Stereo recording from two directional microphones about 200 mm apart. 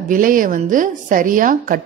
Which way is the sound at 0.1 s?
45° right (ahead or behind).